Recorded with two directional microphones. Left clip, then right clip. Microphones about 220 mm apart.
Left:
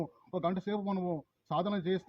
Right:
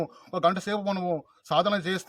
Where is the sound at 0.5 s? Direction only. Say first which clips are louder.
Right 7 dB; 15° right (ahead or behind).